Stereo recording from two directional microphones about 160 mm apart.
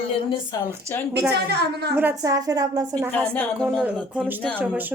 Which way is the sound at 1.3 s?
90° right.